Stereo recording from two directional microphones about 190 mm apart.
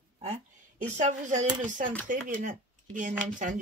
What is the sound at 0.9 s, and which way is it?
Speech, 40° right (ahead or behind).